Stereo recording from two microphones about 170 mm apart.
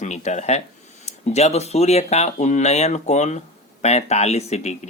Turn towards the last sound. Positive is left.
turn(degrees=40)  # may be behind; listen again after turning